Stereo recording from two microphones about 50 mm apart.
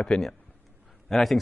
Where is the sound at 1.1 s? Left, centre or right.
Centre.